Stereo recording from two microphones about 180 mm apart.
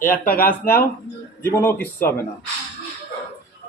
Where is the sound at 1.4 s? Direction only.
15° left (ahead or behind).